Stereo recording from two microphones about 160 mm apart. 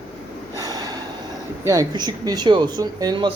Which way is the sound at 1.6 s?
20° right (ahead or behind).